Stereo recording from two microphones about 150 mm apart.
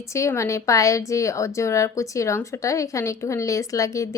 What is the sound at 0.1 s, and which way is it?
A woman's voice, 20° left (ahead or behind).